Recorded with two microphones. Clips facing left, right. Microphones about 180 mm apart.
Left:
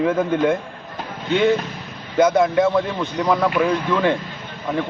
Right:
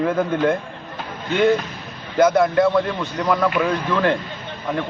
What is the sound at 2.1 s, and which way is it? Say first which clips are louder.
Speech: even; 20° left (ahead or behind).